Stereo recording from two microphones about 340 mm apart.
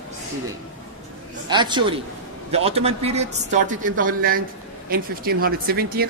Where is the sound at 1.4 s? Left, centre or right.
Centre.